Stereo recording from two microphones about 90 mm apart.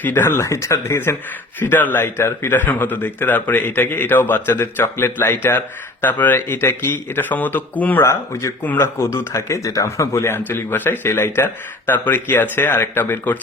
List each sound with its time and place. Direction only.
0.0 s speech: 25° left (ahead or behind)
8.0 s speech: 35° left (ahead or behind)